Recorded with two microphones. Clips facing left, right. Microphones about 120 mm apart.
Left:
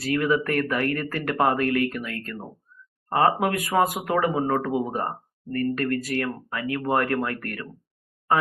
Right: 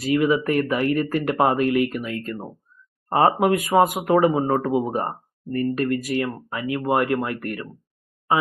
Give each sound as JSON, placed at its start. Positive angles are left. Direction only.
{"t": 0.0, "sound": "speech", "side_deg": -15}